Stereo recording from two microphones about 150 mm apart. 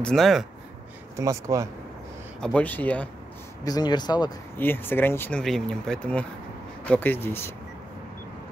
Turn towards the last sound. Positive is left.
turn(degrees=15)  # may be behind; listen again after turning